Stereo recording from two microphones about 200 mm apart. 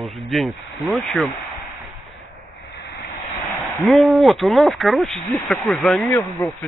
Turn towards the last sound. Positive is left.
turn(degrees=15)  # may be behind; listen again after turning